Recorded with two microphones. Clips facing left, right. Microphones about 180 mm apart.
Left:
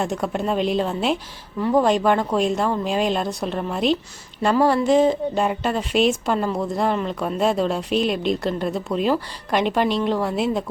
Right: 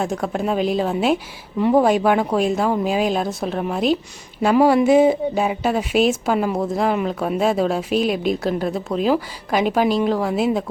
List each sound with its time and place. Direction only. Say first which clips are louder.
0.0 s speech: right 1 dB; centre (ahead or behind)
1.5 s speech: right 3 dB; 20° right (ahead or behind)
1.8 s a woman's voice: right 2 dB; 10° right (ahead or behind)
4.5 s a woman's voice: right 4 dB; 10° right (ahead or behind)